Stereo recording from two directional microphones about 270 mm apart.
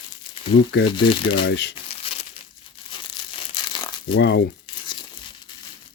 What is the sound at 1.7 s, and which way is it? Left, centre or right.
Crumpling, left.